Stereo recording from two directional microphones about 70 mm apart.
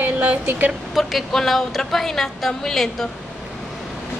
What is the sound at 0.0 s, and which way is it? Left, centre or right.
Speech, right.